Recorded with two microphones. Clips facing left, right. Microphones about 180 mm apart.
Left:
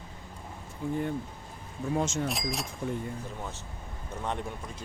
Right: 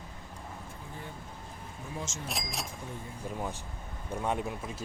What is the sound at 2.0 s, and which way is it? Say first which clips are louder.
Speech: left 10 dB; 65° left (ahead or behind).